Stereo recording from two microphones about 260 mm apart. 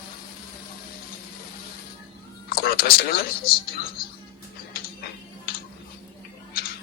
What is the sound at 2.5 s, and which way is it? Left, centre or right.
Speech, left.